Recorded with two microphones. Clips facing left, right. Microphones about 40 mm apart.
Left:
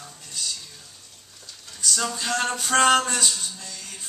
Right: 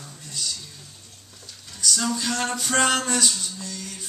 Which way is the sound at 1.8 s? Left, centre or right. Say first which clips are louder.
Right 2 dB; centre.